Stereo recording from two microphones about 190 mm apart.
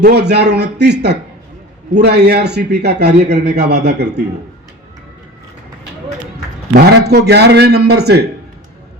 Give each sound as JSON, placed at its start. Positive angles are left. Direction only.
{"t": 0.0, "sound": "a man's voice", "side_deg": -60}
{"t": 6.7, "sound": "a man's voice", "side_deg": -60}